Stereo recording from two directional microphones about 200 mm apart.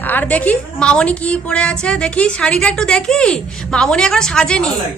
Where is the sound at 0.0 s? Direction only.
10° left (ahead or behind).